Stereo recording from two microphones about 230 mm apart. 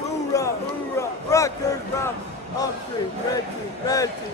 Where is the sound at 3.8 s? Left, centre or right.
Centre.